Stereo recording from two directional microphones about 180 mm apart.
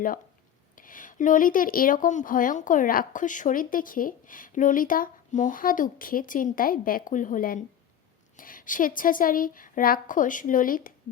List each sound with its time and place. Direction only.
0.8 s a woman's voice: 50° left (ahead or behind)